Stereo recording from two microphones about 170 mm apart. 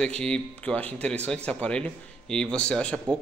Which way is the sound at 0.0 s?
5° left (ahead or behind).